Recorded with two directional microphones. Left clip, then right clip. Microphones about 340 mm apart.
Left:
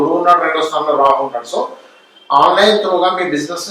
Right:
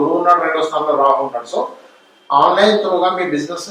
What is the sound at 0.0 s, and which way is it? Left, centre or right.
A man's voice, centre.